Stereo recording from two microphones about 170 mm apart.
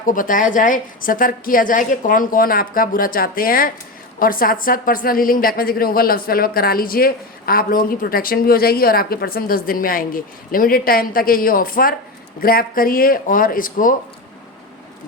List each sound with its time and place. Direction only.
0.0 s a woman's voice: 50° left (ahead or behind)